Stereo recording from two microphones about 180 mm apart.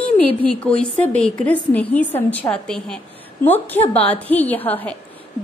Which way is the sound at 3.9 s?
35° left (ahead or behind).